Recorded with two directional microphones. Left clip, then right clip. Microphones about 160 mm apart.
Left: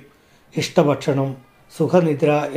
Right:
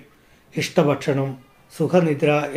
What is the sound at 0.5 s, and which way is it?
Speech, 25° left (ahead or behind).